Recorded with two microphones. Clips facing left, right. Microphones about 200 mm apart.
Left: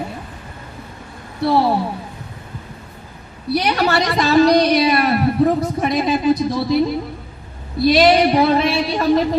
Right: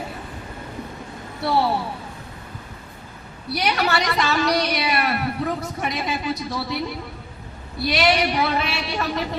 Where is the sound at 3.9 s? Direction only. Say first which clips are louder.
Left 7 dB; 35° left (ahead or behind).